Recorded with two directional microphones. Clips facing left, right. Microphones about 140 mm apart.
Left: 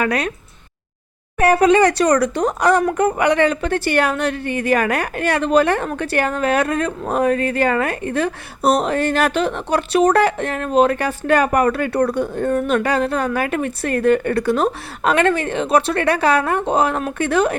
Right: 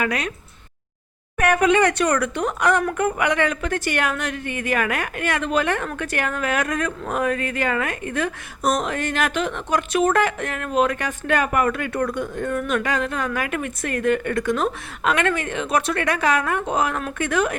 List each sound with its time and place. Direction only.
0.0 s speech: 40° left (ahead or behind)
1.4 s speech: 35° left (ahead or behind)